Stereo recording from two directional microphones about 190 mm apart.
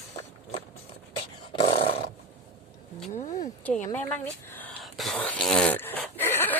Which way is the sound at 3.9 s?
10° left (ahead or behind).